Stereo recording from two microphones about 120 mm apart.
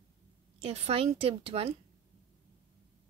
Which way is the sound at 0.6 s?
55° right (ahead or behind).